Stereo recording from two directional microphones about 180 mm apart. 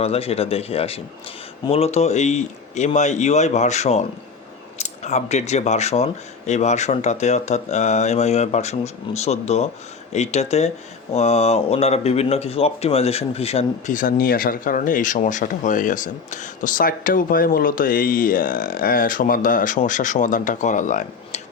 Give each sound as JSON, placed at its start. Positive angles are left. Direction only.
{"t": 0.0, "sound": "speech", "side_deg": 35}